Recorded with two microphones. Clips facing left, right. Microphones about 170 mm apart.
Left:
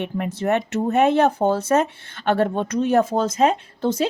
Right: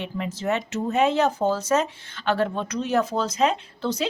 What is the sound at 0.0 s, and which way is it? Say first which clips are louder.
Speech: left 4 dB; 60° left (ahead or behind).